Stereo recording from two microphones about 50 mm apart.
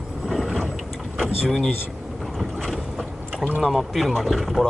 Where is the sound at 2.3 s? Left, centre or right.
Centre.